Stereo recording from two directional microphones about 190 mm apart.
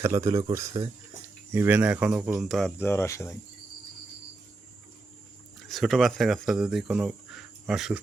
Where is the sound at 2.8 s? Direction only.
15° left (ahead or behind).